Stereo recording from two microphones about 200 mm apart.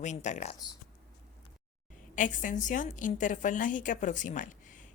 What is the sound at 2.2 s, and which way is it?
A woman's voice, 40° left (ahead or behind).